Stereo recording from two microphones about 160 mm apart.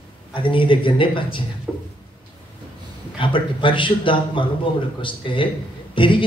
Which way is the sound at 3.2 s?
30° left (ahead or behind).